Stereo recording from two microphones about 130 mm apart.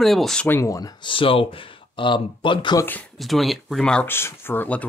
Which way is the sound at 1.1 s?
45° left (ahead or behind).